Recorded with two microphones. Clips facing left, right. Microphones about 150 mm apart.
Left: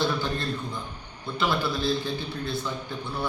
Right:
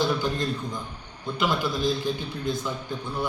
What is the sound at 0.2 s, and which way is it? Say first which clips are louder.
A man's voice: right 2 dB; 15° right (ahead or behind).